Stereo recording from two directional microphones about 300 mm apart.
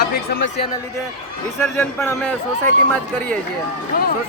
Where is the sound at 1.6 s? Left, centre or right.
Centre.